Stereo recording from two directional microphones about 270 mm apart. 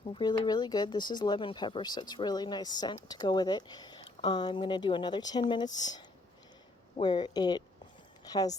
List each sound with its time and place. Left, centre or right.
0.1 s speech: centre